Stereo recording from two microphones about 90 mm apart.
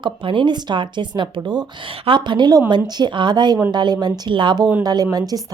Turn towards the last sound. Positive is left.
turn(degrees=-50)  # may be behind; listen again after turning